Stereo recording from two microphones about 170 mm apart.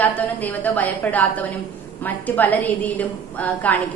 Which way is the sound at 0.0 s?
10° left (ahead or behind).